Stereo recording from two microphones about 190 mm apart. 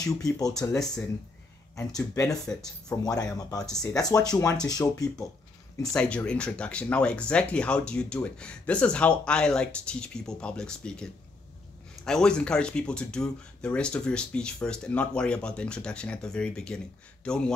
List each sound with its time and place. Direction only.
0.0 s speech: 20° left (ahead or behind)
2.1 s speech: 20° left (ahead or behind)
3.5 s speech: 5° left (ahead or behind)
3.8 s speech: 20° left (ahead or behind)
5.9 s speech: 5° left (ahead or behind)